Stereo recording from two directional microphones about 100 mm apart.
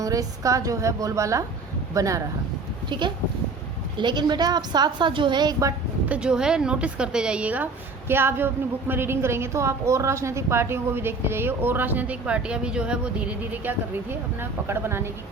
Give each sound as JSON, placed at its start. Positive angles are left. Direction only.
{"t": 0.0, "sound": "a woman's voice", "side_deg": -35}
{"t": 2.9, "sound": "a woman's voice", "side_deg": -50}
{"t": 6.1, "sound": "a woman's voice", "side_deg": -10}